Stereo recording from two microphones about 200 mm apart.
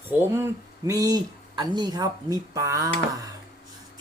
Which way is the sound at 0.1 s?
10° right (ahead or behind).